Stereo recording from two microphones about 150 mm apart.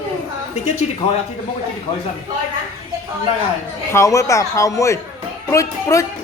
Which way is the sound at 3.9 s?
20° left (ahead or behind).